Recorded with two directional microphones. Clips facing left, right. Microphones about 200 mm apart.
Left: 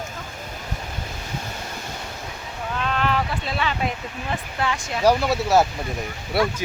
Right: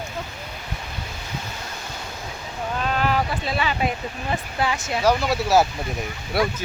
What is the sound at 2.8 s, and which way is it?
Speech, 5° right (ahead or behind).